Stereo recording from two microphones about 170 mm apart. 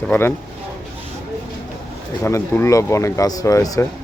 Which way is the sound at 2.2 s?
15° left (ahead or behind).